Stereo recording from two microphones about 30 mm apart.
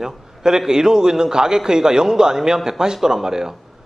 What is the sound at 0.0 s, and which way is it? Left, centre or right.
A man's voice, right.